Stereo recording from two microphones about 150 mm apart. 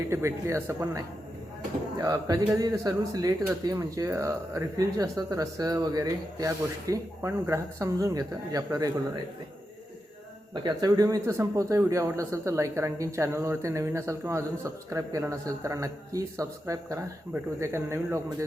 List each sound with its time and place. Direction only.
0.1 s speech: 20° right (ahead or behind)
10.5 s speech: 30° right (ahead or behind)